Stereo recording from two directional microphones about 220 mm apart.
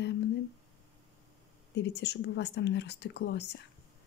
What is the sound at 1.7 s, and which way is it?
Speech, 50° left (ahead or behind).